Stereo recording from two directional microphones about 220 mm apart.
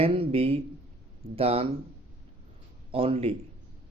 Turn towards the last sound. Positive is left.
turn(degrees=-25)  # may be behind; listen again after turning